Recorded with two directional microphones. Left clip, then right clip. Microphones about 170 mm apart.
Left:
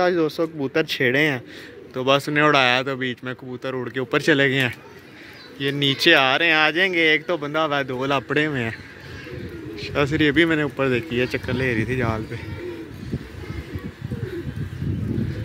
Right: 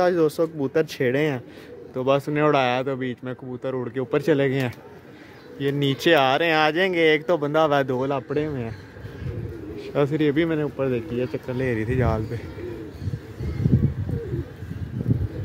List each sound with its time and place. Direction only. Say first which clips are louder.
0.0 s speech: even; 15° right (ahead or behind); by 8.0 s 30° right (ahead or behind)
8.1 s speech: left 4 dB; 5° left (ahead or behind)
9.8 s speech: left 2 dB; 15° right (ahead or behind)